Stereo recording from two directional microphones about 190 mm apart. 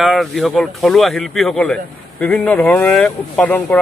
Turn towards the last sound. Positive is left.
turn(degrees=10)  # may be behind; listen again after turning